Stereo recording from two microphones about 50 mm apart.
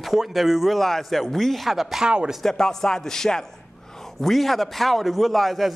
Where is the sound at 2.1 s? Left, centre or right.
Centre.